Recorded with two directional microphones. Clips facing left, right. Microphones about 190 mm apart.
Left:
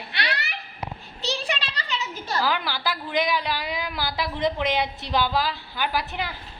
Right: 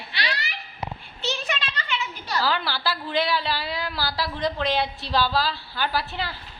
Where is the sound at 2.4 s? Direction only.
15° left (ahead or behind).